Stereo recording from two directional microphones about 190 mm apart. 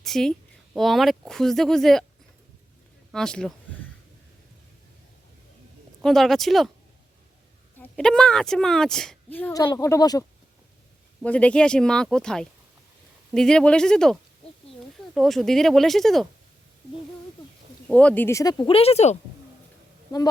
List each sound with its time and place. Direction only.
0.0 s speech: centre (ahead or behind)
3.1 s a woman's voice: 5° left (ahead or behind)
6.0 s a woman's voice: centre (ahead or behind)
7.8 s a woman's voice: 5° left (ahead or behind)
11.2 s a woman's voice: 5° left (ahead or behind)
17.8 s speech: 5° left (ahead or behind); by 19.1 s 35° left (ahead or behind)